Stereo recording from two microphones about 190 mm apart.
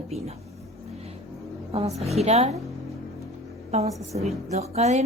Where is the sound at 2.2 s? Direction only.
35° right (ahead or behind).